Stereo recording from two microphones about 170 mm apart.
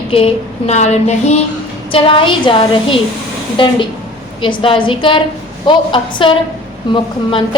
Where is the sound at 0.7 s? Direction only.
40° left (ahead or behind).